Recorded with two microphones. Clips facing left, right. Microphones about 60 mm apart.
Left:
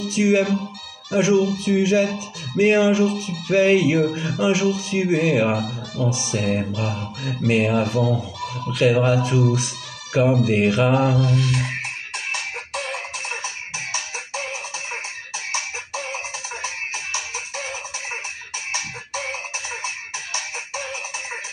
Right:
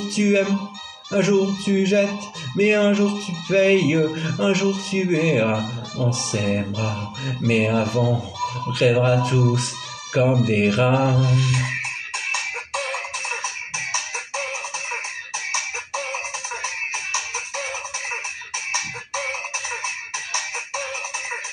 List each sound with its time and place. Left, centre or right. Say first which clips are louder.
0.1 s music: left 1 dB; centre
11.2 s fowl: left 1 dB; right
12.9 s music: right 1 dB; right